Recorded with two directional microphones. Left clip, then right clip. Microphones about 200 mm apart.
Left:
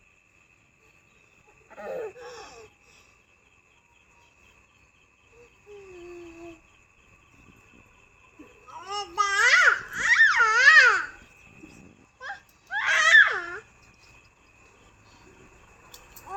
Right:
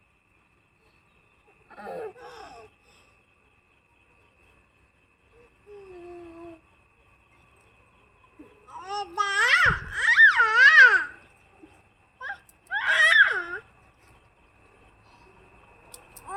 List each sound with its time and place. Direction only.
1.7 s a sound: 15° right (ahead or behind); by 2.6 s 30° right (ahead or behind)
8.7 s babbling: 25° right (ahead or behind)
12.2 s baby cry: 20° right (ahead or behind)